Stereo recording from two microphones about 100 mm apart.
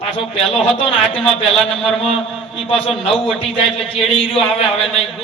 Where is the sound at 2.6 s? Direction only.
70° left (ahead or behind).